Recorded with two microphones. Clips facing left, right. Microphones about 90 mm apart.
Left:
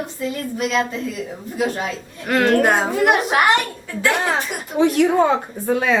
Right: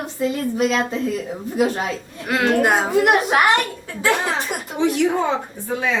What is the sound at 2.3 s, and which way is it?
A child's voice, 5° right (ahead or behind).